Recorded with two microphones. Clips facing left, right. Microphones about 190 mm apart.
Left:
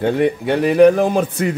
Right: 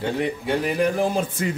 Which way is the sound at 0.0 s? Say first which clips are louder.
Left 8 dB; 60° left (ahead or behind).